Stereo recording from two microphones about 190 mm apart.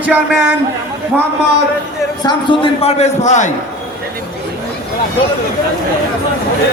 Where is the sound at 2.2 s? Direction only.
25° left (ahead or behind).